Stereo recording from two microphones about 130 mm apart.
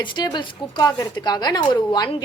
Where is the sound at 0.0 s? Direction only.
35° left (ahead or behind).